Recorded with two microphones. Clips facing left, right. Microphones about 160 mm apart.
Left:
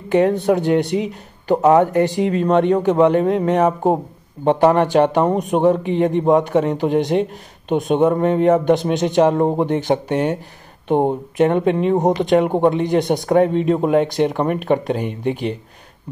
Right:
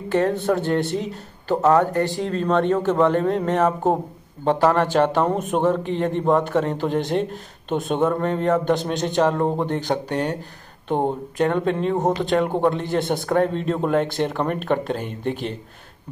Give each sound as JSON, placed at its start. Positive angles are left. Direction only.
{"t": 0.1, "sound": "a man's voice", "side_deg": 20}
{"t": 3.3, "sound": "speech", "side_deg": 0}
{"t": 3.5, "sound": "a man's voice", "side_deg": 15}